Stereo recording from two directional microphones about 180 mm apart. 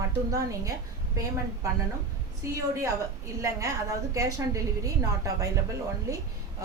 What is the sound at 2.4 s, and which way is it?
A woman's voice, 15° right (ahead or behind).